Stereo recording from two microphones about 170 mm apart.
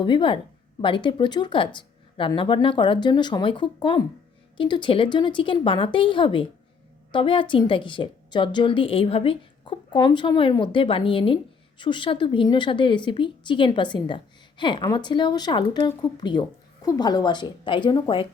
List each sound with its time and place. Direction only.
0.0 s a woman's voice: 30° left (ahead or behind)